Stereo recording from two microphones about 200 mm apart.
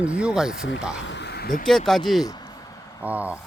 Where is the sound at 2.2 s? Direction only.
20° left (ahead or behind).